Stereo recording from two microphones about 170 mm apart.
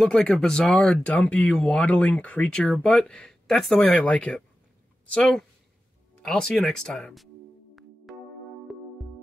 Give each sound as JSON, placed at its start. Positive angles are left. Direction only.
{"t": 0.0, "sound": "speech", "side_deg": 5}
{"t": 8.7, "sound": "music", "side_deg": 0}